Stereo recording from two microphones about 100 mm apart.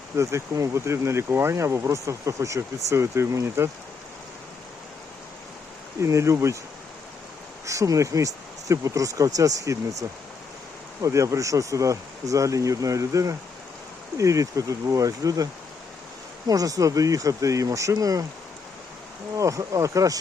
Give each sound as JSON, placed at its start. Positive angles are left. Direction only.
{"t": 0.2, "sound": "speech", "side_deg": -30}
{"t": 6.0, "sound": "speech", "side_deg": -30}
{"t": 7.6, "sound": "speech", "side_deg": -30}
{"t": 16.5, "sound": "speech", "side_deg": -35}
{"t": 19.4, "sound": "speech", "side_deg": -35}